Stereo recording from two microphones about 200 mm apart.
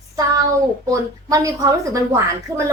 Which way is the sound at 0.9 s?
15° right (ahead or behind).